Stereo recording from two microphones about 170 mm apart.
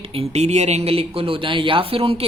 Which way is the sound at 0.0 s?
35° right (ahead or behind).